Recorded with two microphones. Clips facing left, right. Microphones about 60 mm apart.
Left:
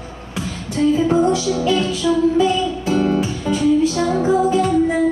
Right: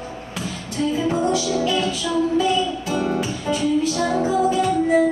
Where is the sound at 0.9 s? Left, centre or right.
Left.